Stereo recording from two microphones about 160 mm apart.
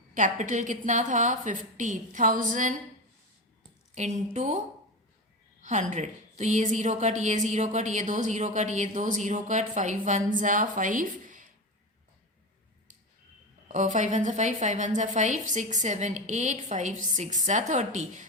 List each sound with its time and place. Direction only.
0.1 s a woman's voice: 50° right (ahead or behind)
3.9 s a woman's voice: 45° right (ahead or behind)
5.9 s a woman's voice: 45° right (ahead or behind)
13.7 s a woman's voice: 50° right (ahead or behind)